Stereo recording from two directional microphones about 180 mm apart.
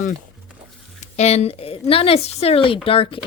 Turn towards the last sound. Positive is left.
turn(degrees=30)  # may be behind; listen again after turning